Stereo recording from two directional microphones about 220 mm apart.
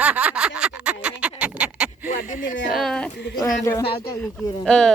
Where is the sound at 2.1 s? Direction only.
35° left (ahead or behind).